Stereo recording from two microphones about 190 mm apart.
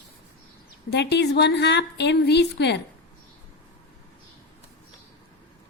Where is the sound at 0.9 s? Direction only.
65° left (ahead or behind).